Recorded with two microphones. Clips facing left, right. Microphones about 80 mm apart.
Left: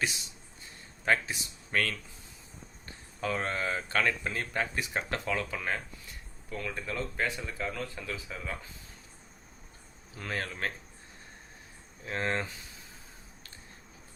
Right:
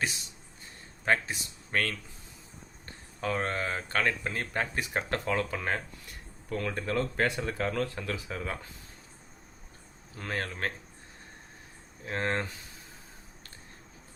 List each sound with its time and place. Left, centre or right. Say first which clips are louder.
1.0 s speech: right 1 dB; right
3.2 s speech: right 1 dB; right
10.2 s speech: right 1 dB; right
12.0 s speech: right 1 dB; right